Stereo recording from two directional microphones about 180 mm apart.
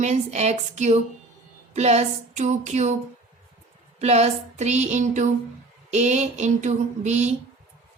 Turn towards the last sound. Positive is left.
turn(degrees=-40)  # may be behind; listen again after turning